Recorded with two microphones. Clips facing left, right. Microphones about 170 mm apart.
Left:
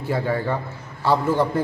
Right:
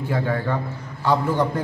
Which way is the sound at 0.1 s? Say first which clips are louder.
Left 1 dB; 10° left (ahead or behind).